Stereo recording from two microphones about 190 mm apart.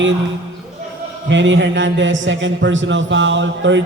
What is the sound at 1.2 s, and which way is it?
A man's voice, 75° right (ahead or behind).